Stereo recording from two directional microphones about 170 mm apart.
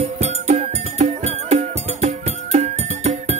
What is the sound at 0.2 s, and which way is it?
Music, 40° right (ahead or behind).